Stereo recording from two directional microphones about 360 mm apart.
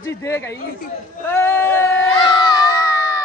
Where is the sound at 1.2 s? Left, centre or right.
Centre.